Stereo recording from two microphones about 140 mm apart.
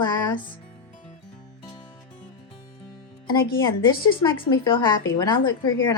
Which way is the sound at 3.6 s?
30° left (ahead or behind).